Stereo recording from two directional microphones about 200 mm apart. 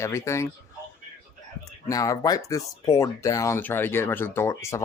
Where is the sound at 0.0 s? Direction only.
15° left (ahead or behind).